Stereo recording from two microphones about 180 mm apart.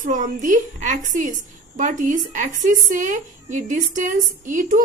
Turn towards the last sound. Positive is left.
turn(degrees=-45)  # may be behind; listen again after turning